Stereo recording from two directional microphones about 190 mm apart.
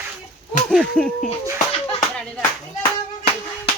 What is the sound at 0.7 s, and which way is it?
Speech, 5° left (ahead or behind).